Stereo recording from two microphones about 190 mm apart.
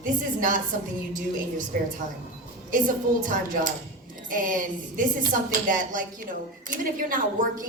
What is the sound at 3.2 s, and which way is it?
A woman's voice, 45° right (ahead or behind).